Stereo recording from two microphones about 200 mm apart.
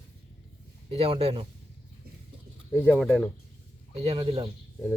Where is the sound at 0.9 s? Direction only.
30° right (ahead or behind).